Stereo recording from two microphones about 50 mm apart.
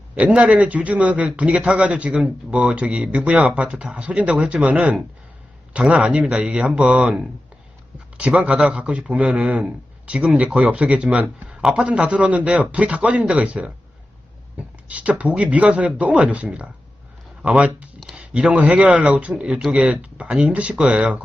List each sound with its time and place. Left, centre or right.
0.2 s a man's voice: right
8.2 s a man's voice: right